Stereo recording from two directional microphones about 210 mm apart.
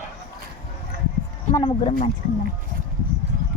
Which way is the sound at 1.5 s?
25° left (ahead or behind).